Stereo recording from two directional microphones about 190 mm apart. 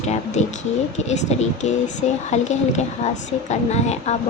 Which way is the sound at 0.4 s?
35° left (ahead or behind).